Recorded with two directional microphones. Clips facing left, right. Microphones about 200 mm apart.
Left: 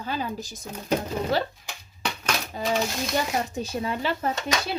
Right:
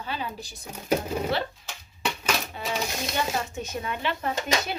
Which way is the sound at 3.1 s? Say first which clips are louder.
Left 2 dB; 35° left (ahead or behind).